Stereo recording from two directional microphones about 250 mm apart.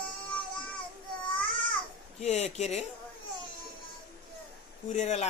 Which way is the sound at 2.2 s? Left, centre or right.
Left.